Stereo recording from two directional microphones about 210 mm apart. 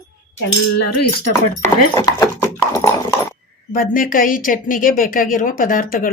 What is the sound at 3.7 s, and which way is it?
A woman's voice, 40° left (ahead or behind).